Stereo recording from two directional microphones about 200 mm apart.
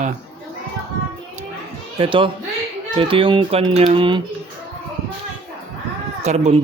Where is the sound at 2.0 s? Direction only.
25° right (ahead or behind).